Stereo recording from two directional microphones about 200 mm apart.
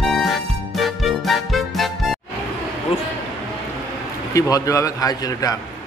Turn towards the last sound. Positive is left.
turn(degrees=15)  # may be behind; listen again after turning